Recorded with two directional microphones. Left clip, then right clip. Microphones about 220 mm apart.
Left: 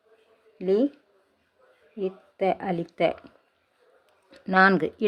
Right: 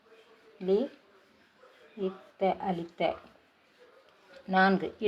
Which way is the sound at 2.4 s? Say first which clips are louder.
Left 4 dB; 45° left (ahead or behind).